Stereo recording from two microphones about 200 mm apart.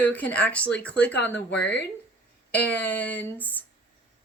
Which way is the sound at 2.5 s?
10° left (ahead or behind).